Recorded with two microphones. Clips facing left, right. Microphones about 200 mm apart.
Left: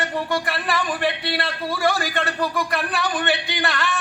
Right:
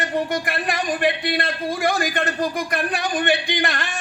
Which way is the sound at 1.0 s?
20° right (ahead or behind).